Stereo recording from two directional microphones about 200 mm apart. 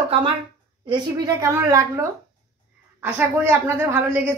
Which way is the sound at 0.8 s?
20° right (ahead or behind).